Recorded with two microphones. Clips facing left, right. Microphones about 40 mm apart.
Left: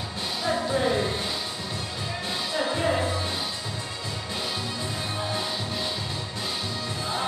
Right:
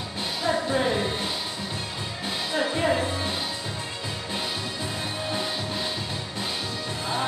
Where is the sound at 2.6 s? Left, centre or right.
Centre.